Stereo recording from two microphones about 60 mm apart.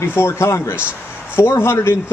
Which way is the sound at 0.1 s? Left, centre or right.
Left.